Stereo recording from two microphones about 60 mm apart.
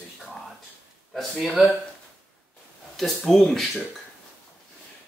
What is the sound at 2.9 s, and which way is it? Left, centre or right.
Speech, centre.